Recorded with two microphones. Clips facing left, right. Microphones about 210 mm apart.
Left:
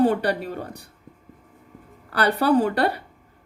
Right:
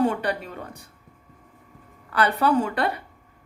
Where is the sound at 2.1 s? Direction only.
35° left (ahead or behind).